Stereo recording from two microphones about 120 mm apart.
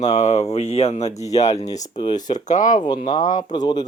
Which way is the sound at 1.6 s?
30° left (ahead or behind).